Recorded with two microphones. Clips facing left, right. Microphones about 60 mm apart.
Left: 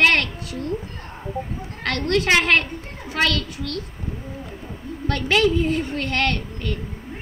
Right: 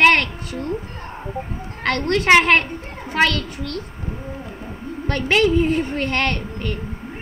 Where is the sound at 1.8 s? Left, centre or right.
Right.